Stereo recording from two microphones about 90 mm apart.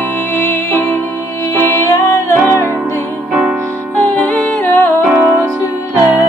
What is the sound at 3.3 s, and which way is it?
Music, 15° right (ahead or behind).